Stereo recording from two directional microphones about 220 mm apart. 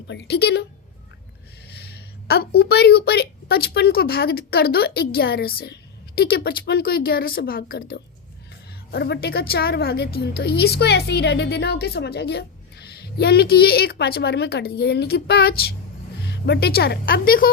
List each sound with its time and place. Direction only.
0.1 s a woman's voice: 50° left (ahead or behind)
1.6 s a woman's voice: 45° left (ahead or behind)